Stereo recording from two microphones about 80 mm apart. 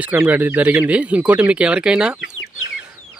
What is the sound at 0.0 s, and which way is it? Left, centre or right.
Speech, centre.